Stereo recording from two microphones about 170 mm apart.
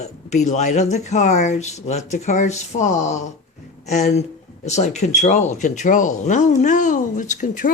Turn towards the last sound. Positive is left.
turn(degrees=50)  # may be behind; listen again after turning